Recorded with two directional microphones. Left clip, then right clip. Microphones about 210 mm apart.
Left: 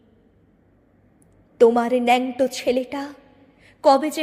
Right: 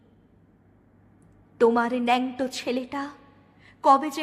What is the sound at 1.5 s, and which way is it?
A woman's voice, 10° left (ahead or behind).